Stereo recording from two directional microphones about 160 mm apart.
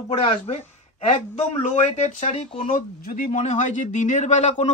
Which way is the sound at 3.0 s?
55° left (ahead or behind).